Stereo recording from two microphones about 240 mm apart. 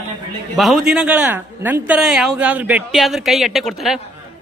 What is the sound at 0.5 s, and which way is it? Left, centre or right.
A man's voice, centre.